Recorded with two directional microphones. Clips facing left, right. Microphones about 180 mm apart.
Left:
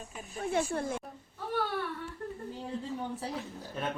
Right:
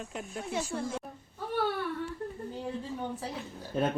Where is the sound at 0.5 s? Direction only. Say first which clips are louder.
Left 3 dB; 55° left (ahead or behind).